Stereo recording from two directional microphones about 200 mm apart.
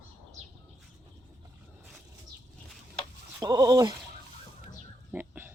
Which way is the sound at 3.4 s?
20° right (ahead or behind).